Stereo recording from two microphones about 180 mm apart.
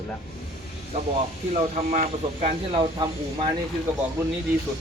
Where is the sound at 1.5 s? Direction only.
35° right (ahead or behind).